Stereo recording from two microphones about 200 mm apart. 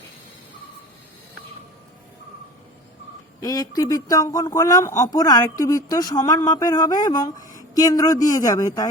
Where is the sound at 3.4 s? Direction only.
20° left (ahead or behind).